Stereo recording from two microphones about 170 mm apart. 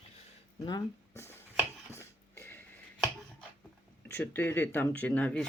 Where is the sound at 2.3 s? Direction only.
10° left (ahead or behind).